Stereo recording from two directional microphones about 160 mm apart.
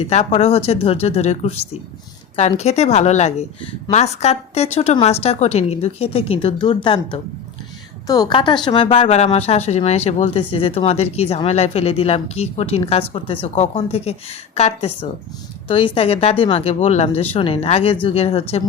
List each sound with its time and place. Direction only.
0.0 s a woman's voice: 40° left (ahead or behind)